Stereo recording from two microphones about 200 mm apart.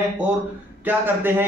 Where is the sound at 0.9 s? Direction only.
10° right (ahead or behind).